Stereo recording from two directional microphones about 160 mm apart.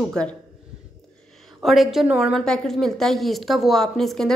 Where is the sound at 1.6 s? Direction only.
Centre (ahead or behind).